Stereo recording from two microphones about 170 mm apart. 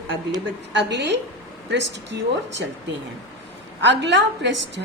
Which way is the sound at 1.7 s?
90° right.